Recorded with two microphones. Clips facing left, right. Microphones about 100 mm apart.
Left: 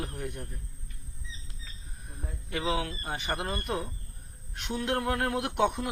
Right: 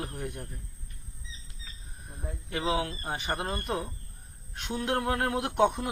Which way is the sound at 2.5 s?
25° right (ahead or behind).